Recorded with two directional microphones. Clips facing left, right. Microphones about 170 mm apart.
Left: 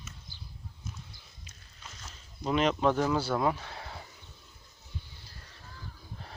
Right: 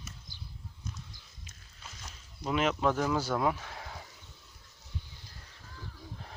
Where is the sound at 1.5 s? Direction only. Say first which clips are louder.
Left 1 dB; centre (ahead or behind).